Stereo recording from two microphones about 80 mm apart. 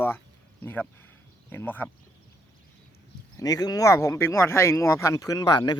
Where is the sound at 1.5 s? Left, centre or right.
Left.